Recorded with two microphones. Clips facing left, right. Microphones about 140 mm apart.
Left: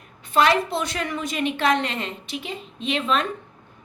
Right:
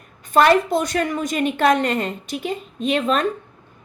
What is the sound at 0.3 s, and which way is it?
A woman's voice, 45° right (ahead or behind).